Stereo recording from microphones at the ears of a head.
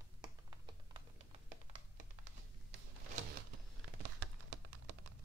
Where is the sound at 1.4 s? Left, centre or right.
Right.